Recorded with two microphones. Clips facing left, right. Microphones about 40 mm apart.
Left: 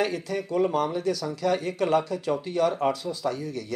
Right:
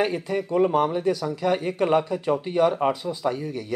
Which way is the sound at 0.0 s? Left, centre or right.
Right.